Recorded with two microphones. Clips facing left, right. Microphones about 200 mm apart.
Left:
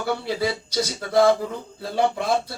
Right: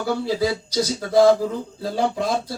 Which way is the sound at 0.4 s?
60° left (ahead or behind).